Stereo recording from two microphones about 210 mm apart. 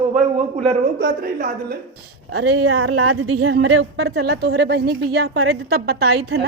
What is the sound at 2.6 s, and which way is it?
Speech, 90° right.